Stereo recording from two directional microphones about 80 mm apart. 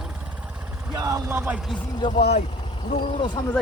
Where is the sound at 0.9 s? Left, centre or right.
Right.